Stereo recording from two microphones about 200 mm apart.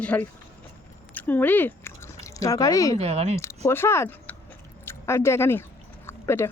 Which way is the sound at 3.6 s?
10° left (ahead or behind).